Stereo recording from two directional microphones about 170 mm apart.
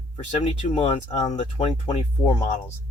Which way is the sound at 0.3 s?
30° left (ahead or behind).